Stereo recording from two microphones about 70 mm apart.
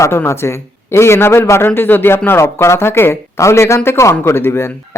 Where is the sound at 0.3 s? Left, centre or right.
Left.